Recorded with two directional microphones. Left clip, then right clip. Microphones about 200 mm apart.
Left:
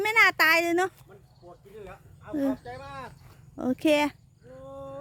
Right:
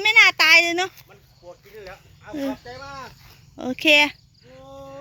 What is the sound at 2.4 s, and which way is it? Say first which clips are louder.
Speech: right 1 dB; 55° right (ahead or behind).